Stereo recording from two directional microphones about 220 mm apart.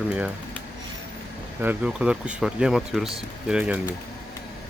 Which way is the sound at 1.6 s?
5° right (ahead or behind).